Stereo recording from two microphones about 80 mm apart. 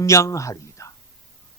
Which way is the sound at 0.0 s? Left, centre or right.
Left.